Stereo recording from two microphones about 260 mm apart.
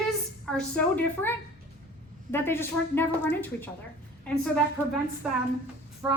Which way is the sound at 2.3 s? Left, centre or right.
Centre.